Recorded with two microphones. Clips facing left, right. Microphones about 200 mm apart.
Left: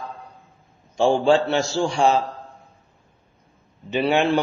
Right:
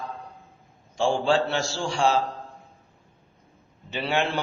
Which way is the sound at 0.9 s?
20° left (ahead or behind).